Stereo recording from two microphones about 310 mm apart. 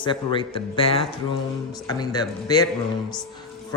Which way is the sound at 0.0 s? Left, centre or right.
Centre.